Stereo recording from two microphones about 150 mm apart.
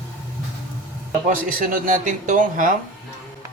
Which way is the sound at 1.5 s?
65° right (ahead or behind).